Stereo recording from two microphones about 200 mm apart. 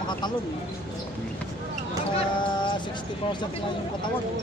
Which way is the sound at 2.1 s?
25° left (ahead or behind).